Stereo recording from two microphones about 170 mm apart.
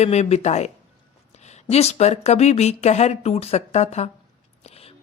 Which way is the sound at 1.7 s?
40° left (ahead or behind).